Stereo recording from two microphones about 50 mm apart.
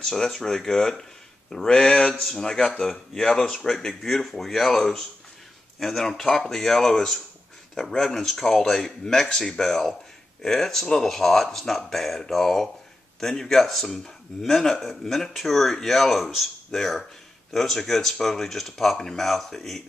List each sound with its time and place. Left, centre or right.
0.0 s speech: centre